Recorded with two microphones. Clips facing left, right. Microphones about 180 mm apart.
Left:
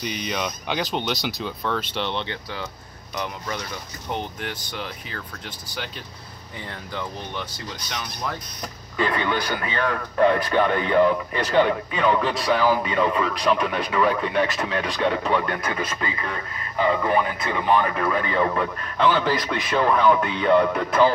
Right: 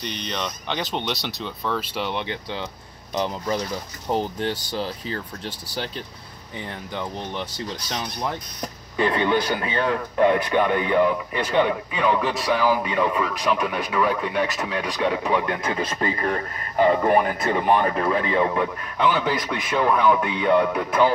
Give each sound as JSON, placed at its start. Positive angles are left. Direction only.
{"t": 0.0, "sound": "speech", "side_deg": 5}
{"t": 2.2, "sound": "speech", "side_deg": -20}
{"t": 3.2, "sound": "speech", "side_deg": -30}
{"t": 6.9, "sound": "a man's voice", "side_deg": -20}
{"t": 15.6, "sound": "speech", "side_deg": -25}
{"t": 17.7, "sound": "a man's voice", "side_deg": -30}